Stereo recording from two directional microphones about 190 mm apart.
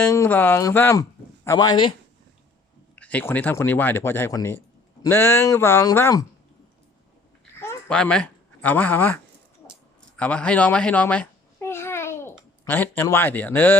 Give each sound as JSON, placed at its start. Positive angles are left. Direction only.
{"t": 0.0, "sound": "speech", "side_deg": 15}
{"t": 2.9, "sound": "speech", "side_deg": 10}
{"t": 7.6, "sound": "speech", "side_deg": 10}
{"t": 10.2, "sound": "babbling", "side_deg": 5}
{"t": 12.6, "sound": "speech", "side_deg": 10}